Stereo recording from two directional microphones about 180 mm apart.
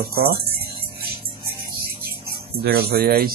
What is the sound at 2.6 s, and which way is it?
Speech, 60° right (ahead or behind).